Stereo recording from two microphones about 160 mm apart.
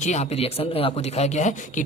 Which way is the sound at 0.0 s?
45° left (ahead or behind).